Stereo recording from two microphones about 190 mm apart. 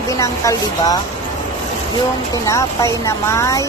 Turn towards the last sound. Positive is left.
turn(degrees=15)  # may be behind; listen again after turning